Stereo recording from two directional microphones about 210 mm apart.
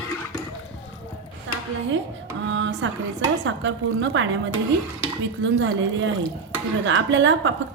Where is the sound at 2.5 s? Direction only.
60° right (ahead or behind).